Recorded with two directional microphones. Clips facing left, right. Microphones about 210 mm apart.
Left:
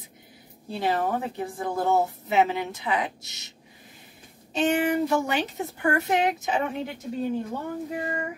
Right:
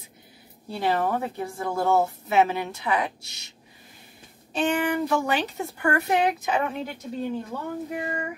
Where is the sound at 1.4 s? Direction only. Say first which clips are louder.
Even; 15° left (ahead or behind).